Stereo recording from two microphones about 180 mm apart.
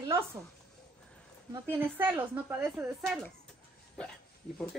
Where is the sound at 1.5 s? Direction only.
10° right (ahead or behind).